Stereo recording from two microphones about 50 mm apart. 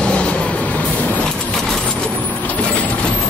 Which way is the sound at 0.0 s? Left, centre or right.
Left.